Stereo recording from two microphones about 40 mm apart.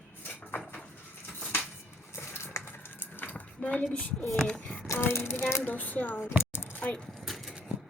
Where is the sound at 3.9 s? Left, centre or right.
Left.